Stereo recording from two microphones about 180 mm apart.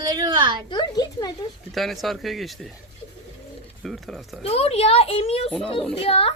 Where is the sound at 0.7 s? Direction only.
25° left (ahead or behind).